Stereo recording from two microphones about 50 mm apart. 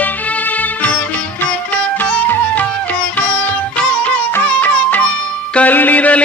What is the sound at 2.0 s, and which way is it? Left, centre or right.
Music, left.